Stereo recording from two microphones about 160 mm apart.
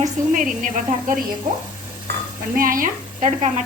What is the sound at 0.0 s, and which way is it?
Speech, 55° right (ahead or behind).